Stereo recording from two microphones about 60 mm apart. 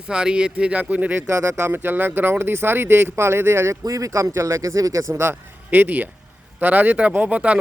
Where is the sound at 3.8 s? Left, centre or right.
Right.